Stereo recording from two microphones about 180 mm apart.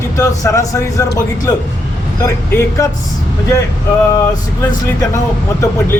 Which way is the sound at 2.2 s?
15° left (ahead or behind).